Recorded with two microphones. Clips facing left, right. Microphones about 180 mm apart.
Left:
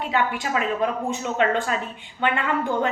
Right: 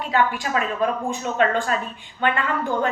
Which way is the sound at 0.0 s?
20° left (ahead or behind).